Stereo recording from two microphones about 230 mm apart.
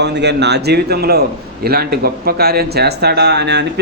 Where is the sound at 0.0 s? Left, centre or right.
Right.